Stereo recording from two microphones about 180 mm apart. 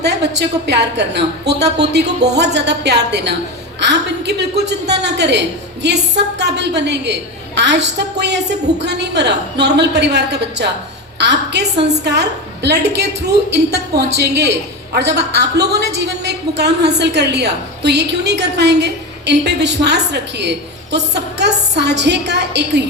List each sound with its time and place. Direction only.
0.0 s a woman's voice: 70° right (ahead or behind)